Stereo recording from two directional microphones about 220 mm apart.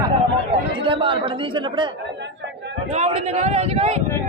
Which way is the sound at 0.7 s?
25° right (ahead or behind).